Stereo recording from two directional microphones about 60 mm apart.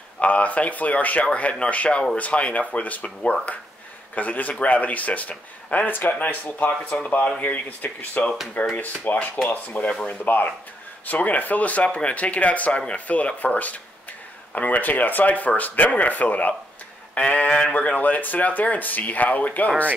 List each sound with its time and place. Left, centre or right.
0.2 s speech: left
9.8 s speech: centre
10.2 s speech: left